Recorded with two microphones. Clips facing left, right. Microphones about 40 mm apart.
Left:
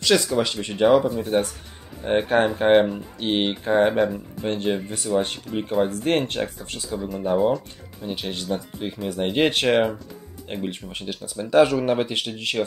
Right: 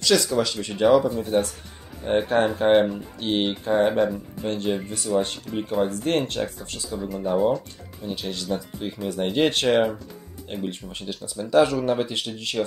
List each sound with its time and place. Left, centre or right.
0.0 s speech: left
4.5 s speech: left
5.6 s speech: centre
5.9 s speech: left
7.2 s speech: centre
8.0 s speech: left
8.8 s speech: centre
9.3 s speech: left